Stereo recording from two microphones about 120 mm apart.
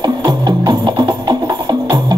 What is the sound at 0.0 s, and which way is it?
Music, 35° right (ahead or behind).